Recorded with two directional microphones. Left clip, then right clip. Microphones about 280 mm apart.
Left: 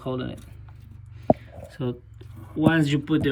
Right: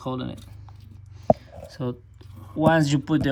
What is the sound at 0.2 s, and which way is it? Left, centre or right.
Speech, centre.